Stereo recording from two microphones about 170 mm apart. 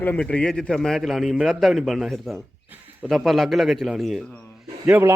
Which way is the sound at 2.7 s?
10° right (ahead or behind).